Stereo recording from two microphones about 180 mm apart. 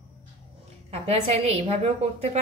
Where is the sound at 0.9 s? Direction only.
35° right (ahead or behind).